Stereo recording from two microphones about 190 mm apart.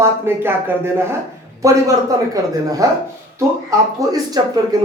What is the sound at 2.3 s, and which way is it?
Speech, 20° right (ahead or behind).